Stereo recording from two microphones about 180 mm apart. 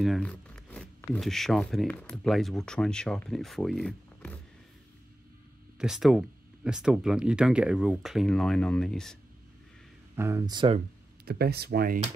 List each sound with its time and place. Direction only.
0.0 s speech: 5° left (ahead or behind)
5.8 s speech: 5° right (ahead or behind)
10.1 s speech: 15° right (ahead or behind)
11.2 s speech: 60° right (ahead or behind)